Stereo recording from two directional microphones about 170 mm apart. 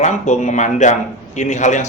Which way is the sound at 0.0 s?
45° left (ahead or behind).